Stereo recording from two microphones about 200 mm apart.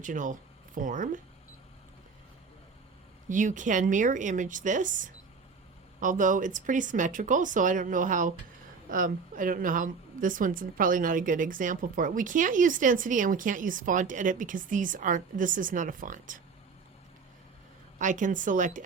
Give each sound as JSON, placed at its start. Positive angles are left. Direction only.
{"t": 0.0, "sound": "a woman's voice", "side_deg": -40}
{"t": 3.2, "sound": "a woman's voice", "side_deg": -40}
{"t": 18.0, "sound": "a woman's voice", "side_deg": -40}